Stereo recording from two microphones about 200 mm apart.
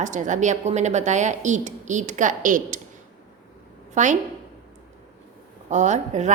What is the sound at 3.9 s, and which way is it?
Speech, 35° right (ahead or behind).